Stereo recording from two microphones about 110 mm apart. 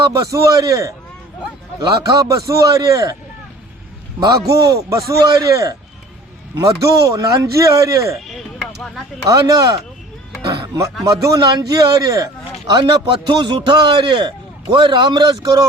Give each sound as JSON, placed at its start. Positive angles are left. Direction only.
{"t": 0.1, "sound": "a man's voice", "side_deg": -30}
{"t": 4.2, "sound": "a man's voice", "side_deg": -35}
{"t": 8.3, "sound": "a sound", "side_deg": 0}
{"t": 9.2, "sound": "a man's voice", "side_deg": -30}
{"t": 10.5, "sound": "music", "side_deg": -30}
{"t": 11.0, "sound": "a man's voice", "side_deg": -30}